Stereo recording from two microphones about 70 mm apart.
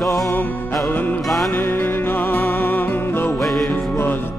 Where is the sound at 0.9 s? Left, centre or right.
Left.